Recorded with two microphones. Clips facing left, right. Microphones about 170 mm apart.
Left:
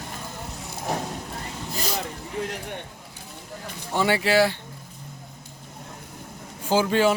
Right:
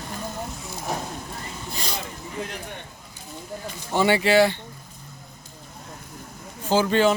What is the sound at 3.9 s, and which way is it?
Speech, centre (ahead or behind).